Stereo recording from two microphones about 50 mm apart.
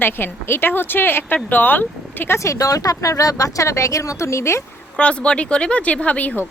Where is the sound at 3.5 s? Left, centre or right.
Left.